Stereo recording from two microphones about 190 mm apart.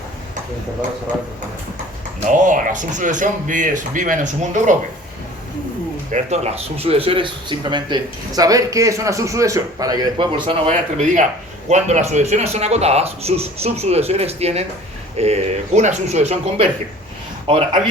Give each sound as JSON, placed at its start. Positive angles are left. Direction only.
{"t": 2.3, "sound": "speech", "side_deg": -45}
{"t": 6.1, "sound": "speech", "side_deg": -40}
{"t": 11.7, "sound": "speech", "side_deg": -35}